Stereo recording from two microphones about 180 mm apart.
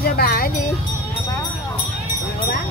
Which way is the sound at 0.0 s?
55° left (ahead or behind).